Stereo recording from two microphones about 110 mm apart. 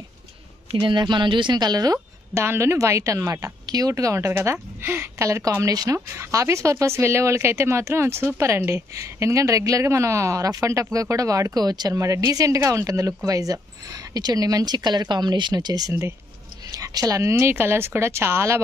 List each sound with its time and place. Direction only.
0.7 s speech: 45° right (ahead or behind)
2.4 s speech: 25° right (ahead or behind)